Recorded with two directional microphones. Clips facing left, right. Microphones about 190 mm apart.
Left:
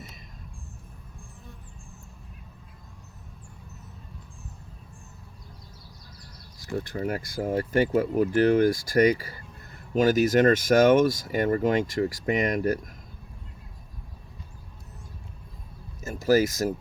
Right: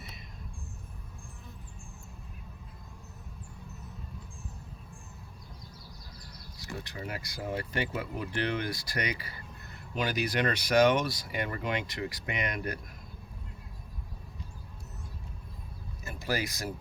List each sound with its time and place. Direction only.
6.7 s speech: 50° left (ahead or behind)
16.0 s speech: 40° left (ahead or behind)